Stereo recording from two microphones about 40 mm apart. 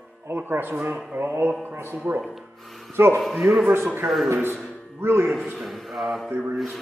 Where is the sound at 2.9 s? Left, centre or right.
Right.